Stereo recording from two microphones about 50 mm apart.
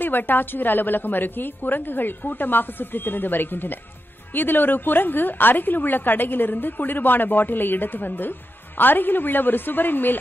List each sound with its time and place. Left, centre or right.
0.0 s a woman's voice: left